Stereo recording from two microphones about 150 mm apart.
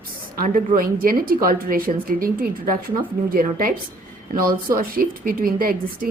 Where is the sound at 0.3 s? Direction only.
65° right (ahead or behind).